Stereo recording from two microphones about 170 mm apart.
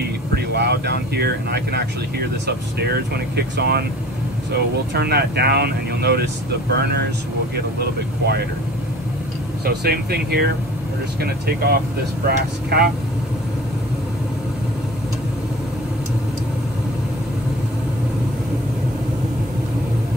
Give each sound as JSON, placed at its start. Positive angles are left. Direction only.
{"t": 0.3, "sound": "speech", "side_deg": -75}
{"t": 9.7, "sound": "speech", "side_deg": -65}